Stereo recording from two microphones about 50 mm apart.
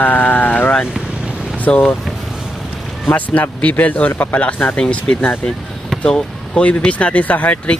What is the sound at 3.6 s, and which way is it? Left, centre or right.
Speech, left.